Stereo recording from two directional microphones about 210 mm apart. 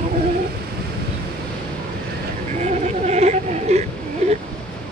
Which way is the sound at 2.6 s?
30° right (ahead or behind).